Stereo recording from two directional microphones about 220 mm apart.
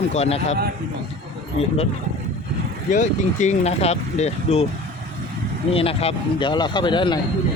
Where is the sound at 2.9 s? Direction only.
35° left (ahead or behind).